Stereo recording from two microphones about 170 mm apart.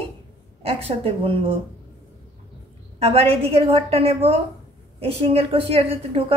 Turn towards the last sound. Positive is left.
turn(degrees=-35)  # may be behind; listen again after turning